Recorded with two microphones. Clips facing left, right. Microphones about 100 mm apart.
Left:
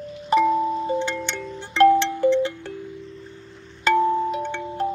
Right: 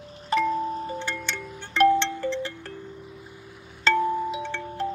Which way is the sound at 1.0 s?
20° left (ahead or behind).